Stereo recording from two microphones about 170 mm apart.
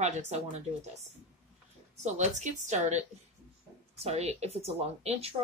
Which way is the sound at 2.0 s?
45° right (ahead or behind).